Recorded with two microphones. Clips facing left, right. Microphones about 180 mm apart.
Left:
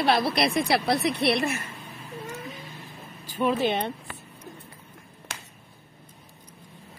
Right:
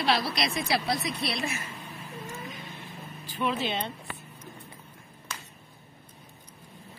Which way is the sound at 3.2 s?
45° left (ahead or behind).